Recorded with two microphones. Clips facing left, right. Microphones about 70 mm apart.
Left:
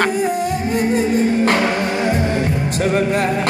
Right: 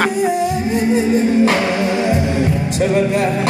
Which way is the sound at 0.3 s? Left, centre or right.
Left.